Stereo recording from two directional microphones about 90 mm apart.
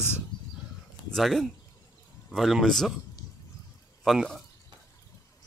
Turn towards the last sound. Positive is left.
turn(degrees=0)  # may be behind; listen again after turning